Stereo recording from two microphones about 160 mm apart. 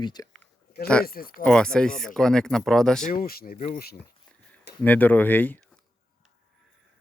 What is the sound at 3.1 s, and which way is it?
Speech, 65° left (ahead or behind).